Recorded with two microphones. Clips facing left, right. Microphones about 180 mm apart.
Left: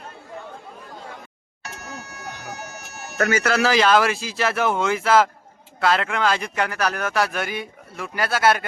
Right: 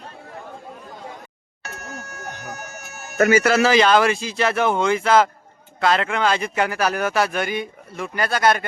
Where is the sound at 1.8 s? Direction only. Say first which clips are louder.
Right 2 dB; 50° right (ahead or behind).